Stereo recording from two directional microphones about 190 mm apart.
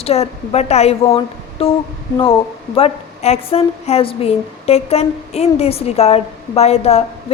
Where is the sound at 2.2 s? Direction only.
30° left (ahead or behind).